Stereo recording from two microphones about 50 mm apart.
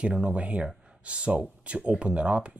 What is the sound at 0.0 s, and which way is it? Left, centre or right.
Speech, right.